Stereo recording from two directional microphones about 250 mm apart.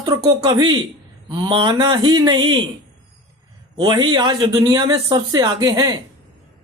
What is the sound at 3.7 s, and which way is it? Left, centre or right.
Speech, centre.